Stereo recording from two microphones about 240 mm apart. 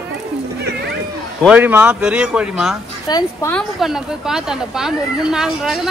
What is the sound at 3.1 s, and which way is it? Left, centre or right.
Speech, centre.